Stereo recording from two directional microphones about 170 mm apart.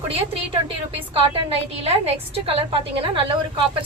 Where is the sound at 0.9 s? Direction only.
35° right (ahead or behind).